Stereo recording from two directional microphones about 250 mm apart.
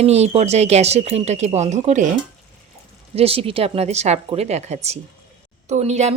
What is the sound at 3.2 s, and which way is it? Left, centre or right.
Speech, right.